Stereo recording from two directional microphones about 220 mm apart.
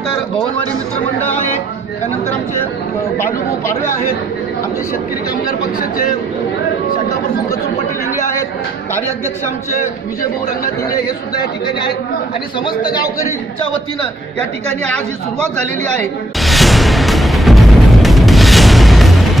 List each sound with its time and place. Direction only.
12.8 s a man's voice: 20° left (ahead or behind)
16.3 s music: centre (ahead or behind)